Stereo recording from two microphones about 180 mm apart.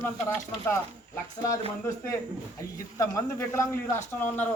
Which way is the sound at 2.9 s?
20° left (ahead or behind).